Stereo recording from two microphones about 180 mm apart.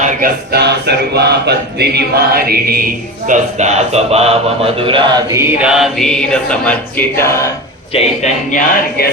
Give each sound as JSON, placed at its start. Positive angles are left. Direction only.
{"t": 0.0, "sound": "a sound", "side_deg": -55}
{"t": 5.3, "sound": "mantra", "side_deg": -15}
{"t": 7.9, "sound": "speech", "side_deg": 40}